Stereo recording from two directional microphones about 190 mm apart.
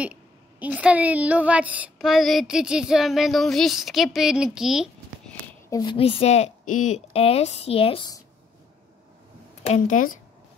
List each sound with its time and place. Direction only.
0.0 s a woman's voice: 5° right (ahead or behind)
5.7 s a woman's voice: 25° left (ahead or behind)
9.6 s speech: 40° left (ahead or behind)